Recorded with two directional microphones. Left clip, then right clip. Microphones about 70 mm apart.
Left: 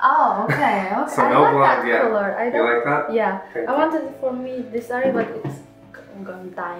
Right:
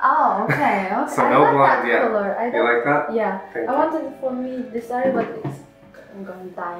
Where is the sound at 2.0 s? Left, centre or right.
Left.